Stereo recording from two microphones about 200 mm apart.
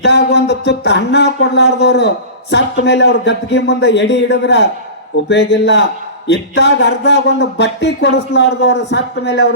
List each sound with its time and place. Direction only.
0.0 s speech: 55° left (ahead or behind)